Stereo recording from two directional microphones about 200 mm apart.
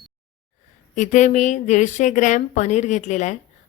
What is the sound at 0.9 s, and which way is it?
A woman's voice, 40° left (ahead or behind).